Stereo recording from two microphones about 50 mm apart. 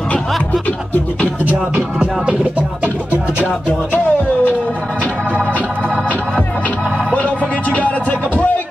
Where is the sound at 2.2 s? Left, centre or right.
Right.